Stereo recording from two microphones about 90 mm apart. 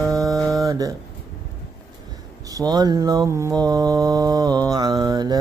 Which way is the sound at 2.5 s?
50° right (ahead or behind).